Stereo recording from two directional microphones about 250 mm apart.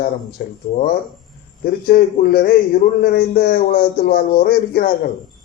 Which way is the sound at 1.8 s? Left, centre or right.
Left.